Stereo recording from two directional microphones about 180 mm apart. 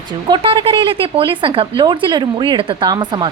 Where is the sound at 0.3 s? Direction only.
30° right (ahead or behind).